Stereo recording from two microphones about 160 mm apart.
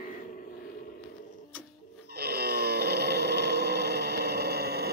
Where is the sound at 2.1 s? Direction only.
90° right.